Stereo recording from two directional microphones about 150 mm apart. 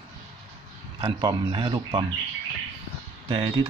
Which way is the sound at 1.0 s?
30° right (ahead or behind).